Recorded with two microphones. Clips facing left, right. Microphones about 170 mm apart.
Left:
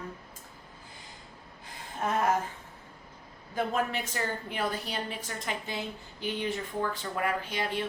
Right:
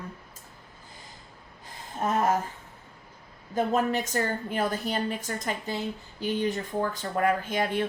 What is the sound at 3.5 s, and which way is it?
Speech, 40° right (ahead or behind).